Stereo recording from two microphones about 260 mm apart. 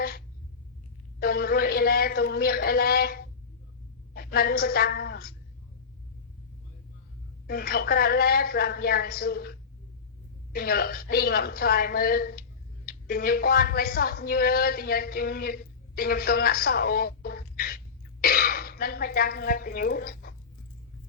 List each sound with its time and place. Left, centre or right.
1.2 s a woman's voice: left
7.4 s a woman's voice: left